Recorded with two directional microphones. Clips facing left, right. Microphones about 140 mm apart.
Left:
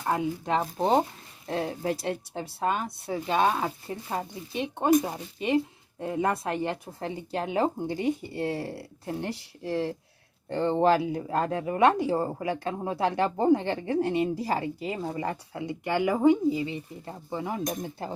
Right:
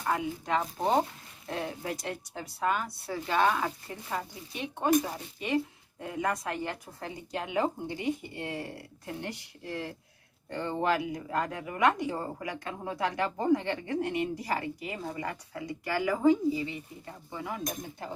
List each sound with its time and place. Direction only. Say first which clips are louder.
0.0 s a woman's voice: left 3 dB; 30° left (ahead or behind)
16.6 s speech: left 4 dB; 30° left (ahead or behind)